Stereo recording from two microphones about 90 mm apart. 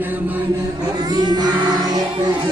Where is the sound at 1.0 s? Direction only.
50° right (ahead or behind).